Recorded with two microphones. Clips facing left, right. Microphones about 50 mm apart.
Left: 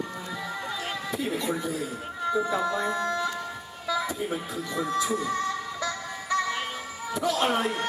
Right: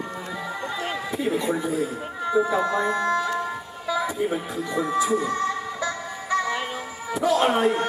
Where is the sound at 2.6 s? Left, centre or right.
Right.